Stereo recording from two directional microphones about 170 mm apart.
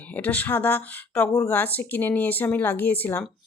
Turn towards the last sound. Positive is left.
turn(degrees=10)  # may be behind; listen again after turning